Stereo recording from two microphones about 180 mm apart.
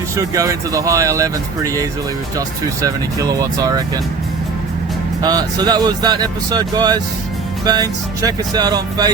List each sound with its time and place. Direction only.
0.2 s speech: 20° right (ahead or behind)
5.2 s speech: 20° right (ahead or behind)